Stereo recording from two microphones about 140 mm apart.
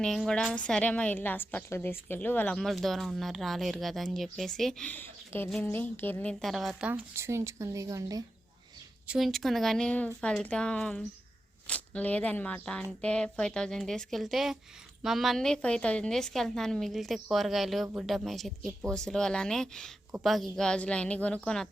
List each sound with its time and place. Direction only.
0.0 s a woman's voice: 5° left (ahead or behind)
5.5 s a woman's voice: centre (ahead or behind)
5.7 s a woman's voice: 15° left (ahead or behind)
6.4 s speech: centre (ahead or behind); by 8.2 s 25° right (ahead or behind)
9.0 s a woman's voice: centre (ahead or behind)